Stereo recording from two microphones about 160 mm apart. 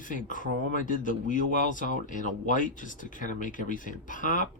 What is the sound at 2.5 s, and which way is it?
Speech, 55° left (ahead or behind).